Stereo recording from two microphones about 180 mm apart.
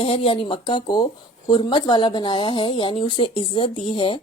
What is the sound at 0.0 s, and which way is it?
Speech, 30° left (ahead or behind).